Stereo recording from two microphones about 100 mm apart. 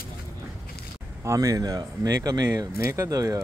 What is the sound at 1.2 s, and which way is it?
Speech, 35° right (ahead or behind).